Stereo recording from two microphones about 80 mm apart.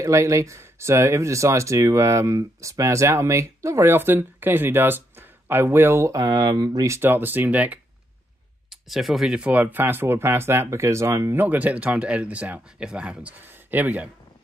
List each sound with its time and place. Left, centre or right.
0.0 s speech: right
6.1 s speech: right
6.9 s speech: right
8.6 s speech: centre; by 11.3 s right
11.3 s speech: centre
13.4 s speech: right